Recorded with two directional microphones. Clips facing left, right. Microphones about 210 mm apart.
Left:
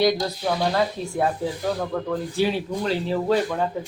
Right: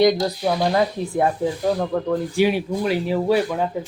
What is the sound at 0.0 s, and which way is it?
Speech, 20° right (ahead or behind).